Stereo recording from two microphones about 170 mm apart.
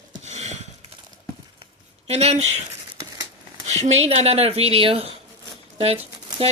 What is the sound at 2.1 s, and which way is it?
Speech, 40° right (ahead or behind).